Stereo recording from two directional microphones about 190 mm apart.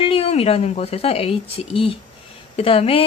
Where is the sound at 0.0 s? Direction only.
30° left (ahead or behind).